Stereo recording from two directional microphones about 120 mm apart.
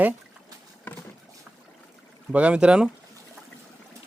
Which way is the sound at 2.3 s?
10° right (ahead or behind).